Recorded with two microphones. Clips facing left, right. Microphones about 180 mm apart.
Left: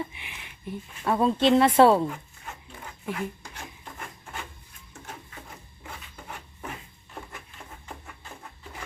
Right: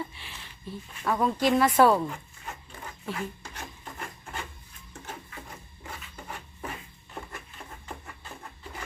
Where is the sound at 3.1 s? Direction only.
10° left (ahead or behind).